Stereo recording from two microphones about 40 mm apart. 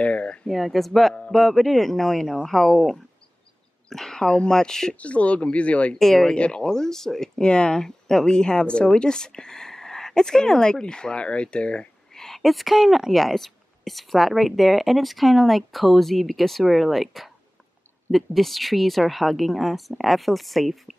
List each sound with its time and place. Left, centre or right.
0.0 s speech: left
0.5 s speech: centre
3.9 s speech: centre
4.9 s speech: left
5.9 s speech: centre
6.2 s speech: left
7.4 s speech: left
12.1 s a sound: centre
12.4 s speech: centre
13.1 s speech: centre